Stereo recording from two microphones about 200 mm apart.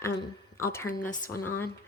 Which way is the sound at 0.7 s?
10° left (ahead or behind).